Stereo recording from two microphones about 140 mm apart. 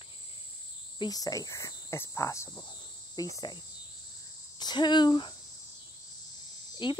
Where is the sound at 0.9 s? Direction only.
30° left (ahead or behind).